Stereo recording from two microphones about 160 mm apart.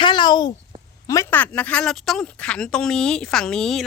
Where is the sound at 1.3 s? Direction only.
10° left (ahead or behind).